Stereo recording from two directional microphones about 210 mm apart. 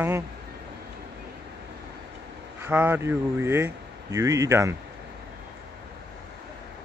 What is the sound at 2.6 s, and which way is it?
Speech, 10° right (ahead or behind).